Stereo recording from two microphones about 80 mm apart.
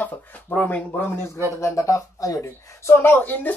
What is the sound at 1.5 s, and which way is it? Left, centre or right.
Speech, left.